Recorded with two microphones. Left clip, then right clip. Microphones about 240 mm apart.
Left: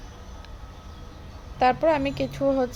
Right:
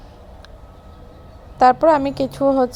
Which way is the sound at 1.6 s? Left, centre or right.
Right.